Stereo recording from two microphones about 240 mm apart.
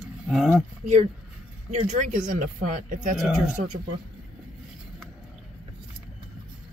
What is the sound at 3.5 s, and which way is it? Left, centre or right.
Speech, right.